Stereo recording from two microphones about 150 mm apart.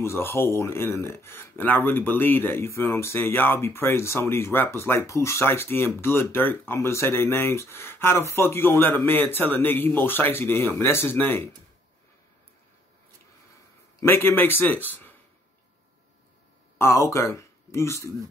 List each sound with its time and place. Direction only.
0.0 s speech: 15° left (ahead or behind)
14.0 s speech: 15° left (ahead or behind)
16.7 s speech: 15° left (ahead or behind)